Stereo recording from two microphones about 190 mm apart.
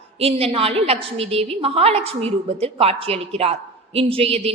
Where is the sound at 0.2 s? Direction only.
30° right (ahead or behind).